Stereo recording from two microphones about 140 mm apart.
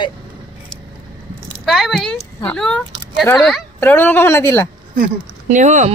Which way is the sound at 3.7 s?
15° left (ahead or behind).